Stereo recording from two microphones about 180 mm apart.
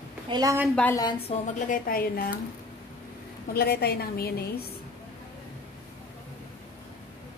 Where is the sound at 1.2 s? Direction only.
45° left (ahead or behind).